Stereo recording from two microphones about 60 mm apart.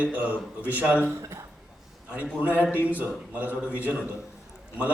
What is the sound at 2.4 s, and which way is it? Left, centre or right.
A man's voice, right.